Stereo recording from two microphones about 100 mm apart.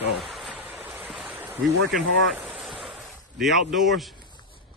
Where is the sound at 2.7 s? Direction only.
Centre (ahead or behind).